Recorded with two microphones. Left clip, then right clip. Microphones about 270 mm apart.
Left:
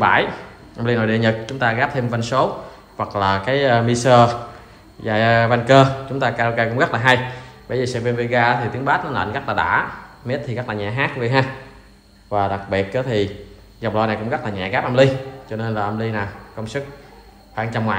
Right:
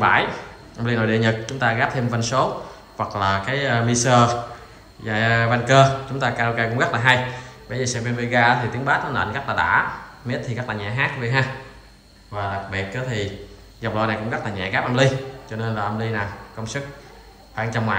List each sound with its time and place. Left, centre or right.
0.0 s a man's voice: centre